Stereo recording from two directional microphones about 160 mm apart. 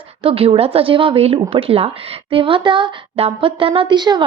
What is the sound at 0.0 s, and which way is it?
A woman's voice, 35° right (ahead or behind).